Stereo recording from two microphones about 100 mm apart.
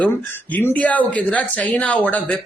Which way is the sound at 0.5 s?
15° left (ahead or behind).